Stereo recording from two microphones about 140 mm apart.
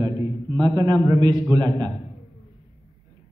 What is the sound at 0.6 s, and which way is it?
A man's voice, 30° right (ahead or behind).